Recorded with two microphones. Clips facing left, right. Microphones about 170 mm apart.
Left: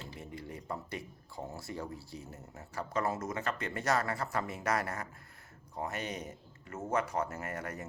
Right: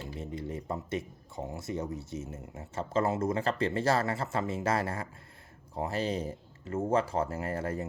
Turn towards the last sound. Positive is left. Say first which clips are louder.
# right 7 dB
turn(degrees=-30)  # may be behind; listen again after turning